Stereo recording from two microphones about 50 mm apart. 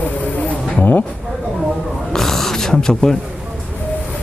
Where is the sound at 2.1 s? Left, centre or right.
Centre.